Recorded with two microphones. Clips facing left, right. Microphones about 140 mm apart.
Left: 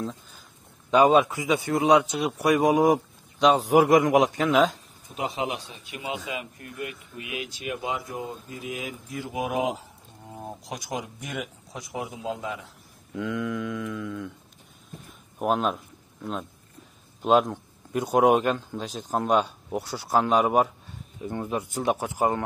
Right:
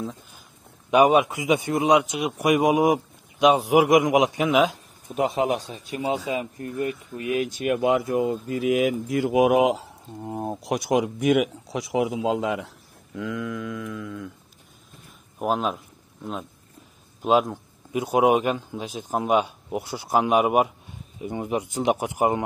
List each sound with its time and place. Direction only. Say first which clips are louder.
0.8 s a man's voice: right 1 dB; 15° right (ahead or behind)
5.1 s speech: right 7 dB; 45° right (ahead or behind); by 12.7 s 75° right (ahead or behind)
13.1 s mantra: left 1 dB; centre (ahead or behind)
15.0 s a sound: even; centre (ahead or behind)
17.2 s a man's voice: even; 5° right (ahead or behind)